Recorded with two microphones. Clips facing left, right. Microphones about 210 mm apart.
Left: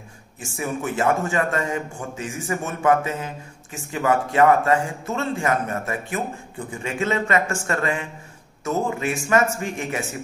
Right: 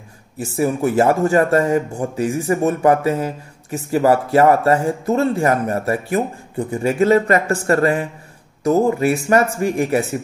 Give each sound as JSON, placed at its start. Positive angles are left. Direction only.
{"t": 0.4, "sound": "speech", "side_deg": -40}